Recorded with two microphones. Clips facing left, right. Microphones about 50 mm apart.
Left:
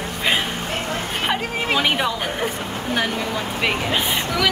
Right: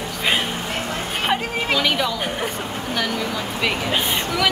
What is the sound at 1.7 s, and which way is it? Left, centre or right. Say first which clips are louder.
Speech: left 1 dB; left.